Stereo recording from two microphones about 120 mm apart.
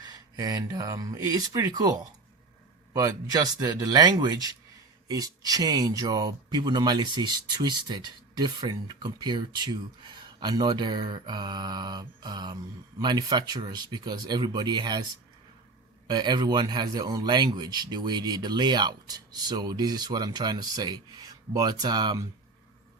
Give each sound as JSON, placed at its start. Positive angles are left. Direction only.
{"t": 0.0, "sound": "speech", "side_deg": -30}
{"t": 16.0, "sound": "speech", "side_deg": -35}